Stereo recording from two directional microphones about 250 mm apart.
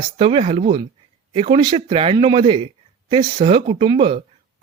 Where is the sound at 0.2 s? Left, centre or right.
Right.